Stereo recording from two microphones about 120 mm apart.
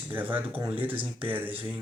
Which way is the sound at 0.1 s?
15° right (ahead or behind).